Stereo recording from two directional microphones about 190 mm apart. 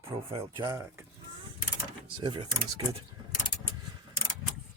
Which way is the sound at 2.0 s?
25° right (ahead or behind).